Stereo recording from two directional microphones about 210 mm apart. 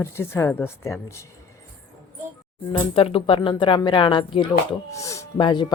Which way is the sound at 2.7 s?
25° left (ahead or behind).